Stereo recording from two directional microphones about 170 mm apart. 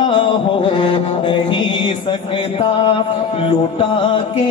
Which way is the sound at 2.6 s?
30° left (ahead or behind).